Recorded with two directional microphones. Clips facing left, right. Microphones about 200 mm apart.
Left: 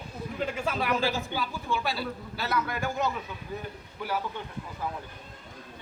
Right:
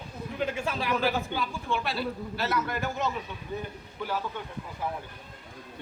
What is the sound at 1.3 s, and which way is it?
A man's voice, centre (ahead or behind).